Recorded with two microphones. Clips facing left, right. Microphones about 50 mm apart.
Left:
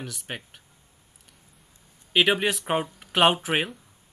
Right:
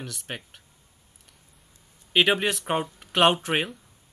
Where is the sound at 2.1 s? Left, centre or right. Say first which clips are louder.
Even; centre.